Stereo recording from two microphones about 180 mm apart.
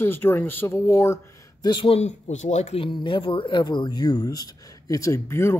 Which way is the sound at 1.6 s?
30° left (ahead or behind).